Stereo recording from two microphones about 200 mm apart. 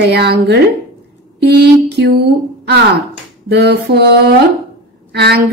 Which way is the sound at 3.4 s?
55° right (ahead or behind).